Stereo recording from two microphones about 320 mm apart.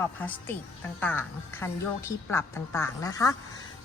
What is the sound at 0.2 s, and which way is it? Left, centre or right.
A woman's voice, centre.